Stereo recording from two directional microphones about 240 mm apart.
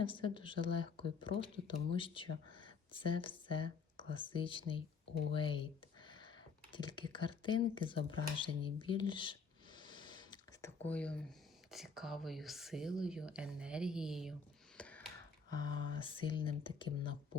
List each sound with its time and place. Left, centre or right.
0.0 s speech: left
6.1 s computer keyboard: centre
10.8 s speech: centre